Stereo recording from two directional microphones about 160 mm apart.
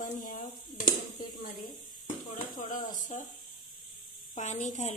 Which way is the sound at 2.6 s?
55° left (ahead or behind).